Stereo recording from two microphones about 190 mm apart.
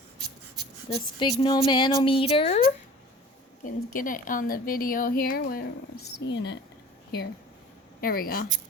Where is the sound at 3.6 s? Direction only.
45° left (ahead or behind); by 6.6 s 65° left (ahead or behind).